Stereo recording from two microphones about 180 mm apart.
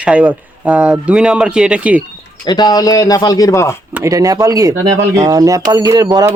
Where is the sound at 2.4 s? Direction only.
25° left (ahead or behind).